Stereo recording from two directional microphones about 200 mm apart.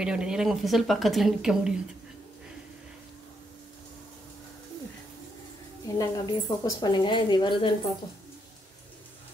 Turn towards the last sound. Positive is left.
turn(degrees=25)  # may be behind; listen again after turning